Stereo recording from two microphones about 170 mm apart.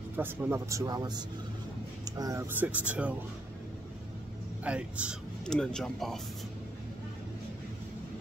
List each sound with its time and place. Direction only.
0.1 s speech: 15° right (ahead or behind)
4.6 s speech: 5° right (ahead or behind)
5.4 s speech: 5° left (ahead or behind)